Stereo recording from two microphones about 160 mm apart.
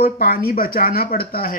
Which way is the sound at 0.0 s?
70° left (ahead or behind).